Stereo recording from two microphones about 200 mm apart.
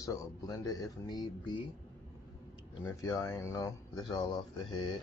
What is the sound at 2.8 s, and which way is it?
Speech, 15° left (ahead or behind).